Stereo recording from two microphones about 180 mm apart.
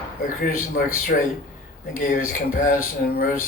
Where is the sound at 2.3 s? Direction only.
50° left (ahead or behind).